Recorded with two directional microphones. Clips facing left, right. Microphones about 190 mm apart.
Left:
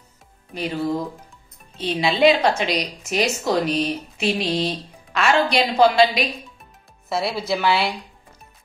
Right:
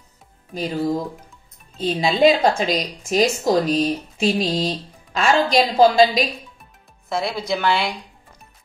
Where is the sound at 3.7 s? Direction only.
40° right (ahead or behind).